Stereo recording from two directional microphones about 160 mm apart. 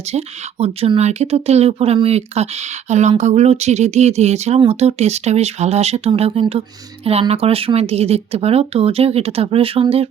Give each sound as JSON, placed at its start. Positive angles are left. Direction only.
{"t": 0.1, "sound": "speech", "side_deg": -40}